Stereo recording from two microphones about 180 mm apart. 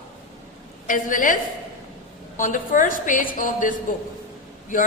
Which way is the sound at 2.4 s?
45° left (ahead or behind).